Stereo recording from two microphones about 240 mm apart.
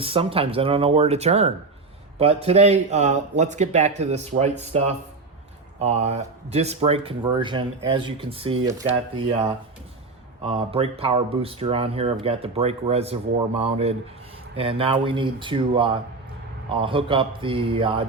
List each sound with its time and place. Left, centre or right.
0.0 s speech: right
10.4 s speech: right